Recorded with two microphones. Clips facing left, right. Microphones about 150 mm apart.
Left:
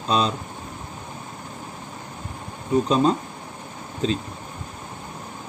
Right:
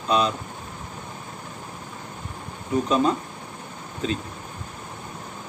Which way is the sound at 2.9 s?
30° left (ahead or behind).